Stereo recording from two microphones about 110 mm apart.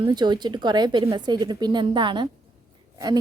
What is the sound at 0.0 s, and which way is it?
A woman's voice, 40° right (ahead or behind).